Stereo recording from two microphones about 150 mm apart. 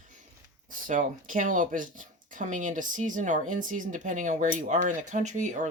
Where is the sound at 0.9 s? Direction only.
60° right (ahead or behind).